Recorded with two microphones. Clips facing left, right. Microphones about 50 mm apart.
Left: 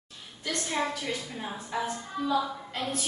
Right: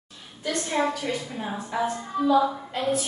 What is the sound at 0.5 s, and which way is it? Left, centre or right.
Speech, right.